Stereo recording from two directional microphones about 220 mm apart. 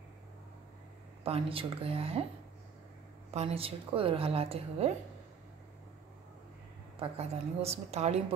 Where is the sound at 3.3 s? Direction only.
25° right (ahead or behind).